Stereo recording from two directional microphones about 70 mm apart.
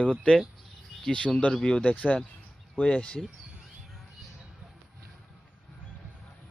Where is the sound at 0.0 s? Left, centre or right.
Centre.